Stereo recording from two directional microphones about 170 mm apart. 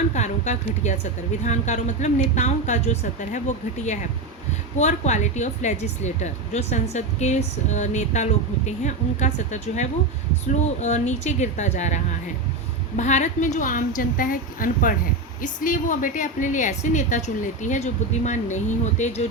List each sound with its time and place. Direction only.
0.1 s a woman's voice: 45° left (ahead or behind)
4.8 s a woman's voice: 45° left (ahead or behind)